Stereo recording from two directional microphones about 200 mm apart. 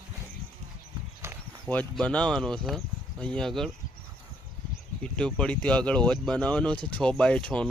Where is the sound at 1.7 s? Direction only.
5° left (ahead or behind).